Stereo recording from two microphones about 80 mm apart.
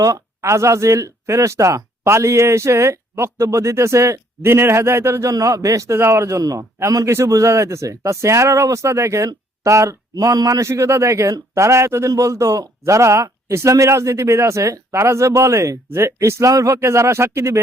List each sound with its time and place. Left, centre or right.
0.0 s speech: right
10.7 s speech: right
16.5 s speech: right
16.7 s speech: right